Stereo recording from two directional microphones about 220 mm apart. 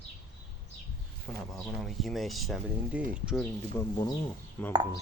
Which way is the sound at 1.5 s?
Centre (ahead or behind).